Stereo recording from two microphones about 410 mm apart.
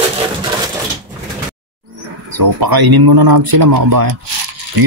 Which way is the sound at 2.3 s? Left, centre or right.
Right.